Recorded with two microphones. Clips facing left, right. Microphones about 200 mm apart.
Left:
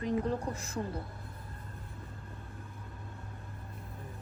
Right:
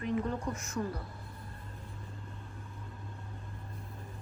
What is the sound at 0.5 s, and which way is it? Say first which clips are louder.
Speech: right 1 dB; 30° left (ahead or behind).